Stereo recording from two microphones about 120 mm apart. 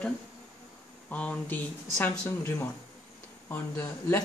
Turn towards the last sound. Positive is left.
turn(degrees=20)  # may be behind; listen again after turning